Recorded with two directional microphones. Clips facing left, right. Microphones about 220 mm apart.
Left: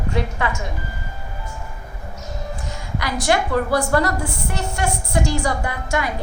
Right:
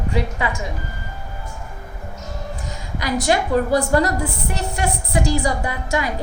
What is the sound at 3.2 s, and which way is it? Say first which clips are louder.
A woman's voice: right 1 dB; 15° right (ahead or behind).